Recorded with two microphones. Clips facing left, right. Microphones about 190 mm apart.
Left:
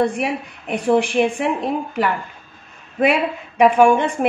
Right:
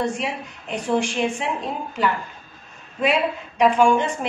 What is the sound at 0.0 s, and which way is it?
A woman's voice, 60° left (ahead or behind).